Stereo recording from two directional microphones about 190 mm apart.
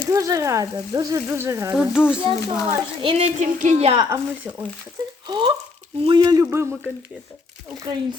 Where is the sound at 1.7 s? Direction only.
5° right (ahead or behind).